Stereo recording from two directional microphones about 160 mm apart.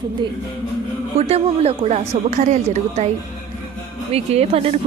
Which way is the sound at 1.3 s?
40° right (ahead or behind).